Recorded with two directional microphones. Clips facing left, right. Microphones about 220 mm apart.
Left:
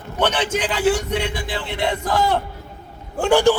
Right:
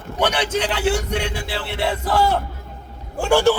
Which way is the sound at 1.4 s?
15° left (ahead or behind).